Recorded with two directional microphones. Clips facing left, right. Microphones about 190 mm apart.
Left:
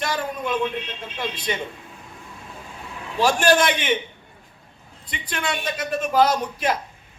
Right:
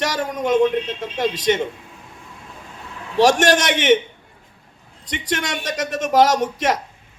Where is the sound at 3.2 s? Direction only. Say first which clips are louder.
Right 3 dB; 80° right.